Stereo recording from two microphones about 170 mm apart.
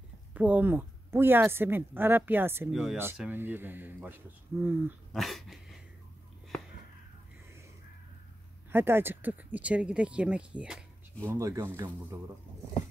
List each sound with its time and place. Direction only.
0.3 s a woman's voice: 10° right (ahead or behind)
5.1 s speech: centre (ahead or behind)
8.7 s a woman's voice: 15° right (ahead or behind)
11.2 s a woman's voice: 20° right (ahead or behind)